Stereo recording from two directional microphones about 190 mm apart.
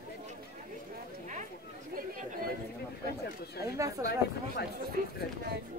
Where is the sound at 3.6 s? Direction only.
15° right (ahead or behind).